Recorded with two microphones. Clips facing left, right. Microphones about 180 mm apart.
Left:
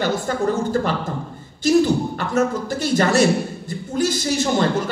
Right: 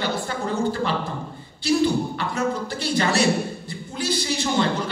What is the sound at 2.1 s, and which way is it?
A man's voice, 45° left (ahead or behind).